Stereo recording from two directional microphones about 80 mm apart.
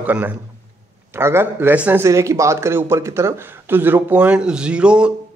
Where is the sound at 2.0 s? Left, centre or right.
Right; by 5.1 s centre.